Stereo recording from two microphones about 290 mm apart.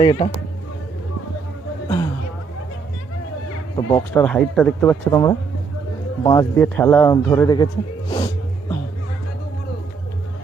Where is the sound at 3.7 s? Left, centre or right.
Centre.